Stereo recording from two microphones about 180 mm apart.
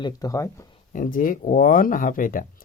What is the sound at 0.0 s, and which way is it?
Speech, 20° left (ahead or behind).